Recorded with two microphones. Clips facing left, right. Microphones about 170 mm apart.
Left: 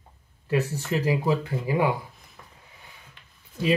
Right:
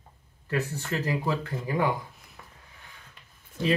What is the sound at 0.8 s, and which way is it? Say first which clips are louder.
Speech: left 5 dB; 15° left (ahead or behind).